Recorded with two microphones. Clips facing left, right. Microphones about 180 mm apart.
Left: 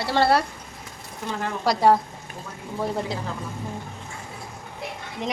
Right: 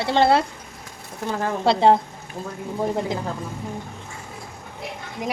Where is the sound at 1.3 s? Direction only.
40° right (ahead or behind).